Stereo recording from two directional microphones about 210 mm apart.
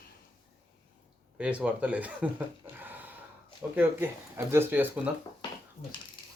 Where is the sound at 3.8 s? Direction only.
10° right (ahead or behind).